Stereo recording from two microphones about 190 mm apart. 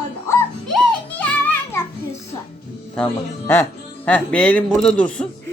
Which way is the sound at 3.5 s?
10° left (ahead or behind).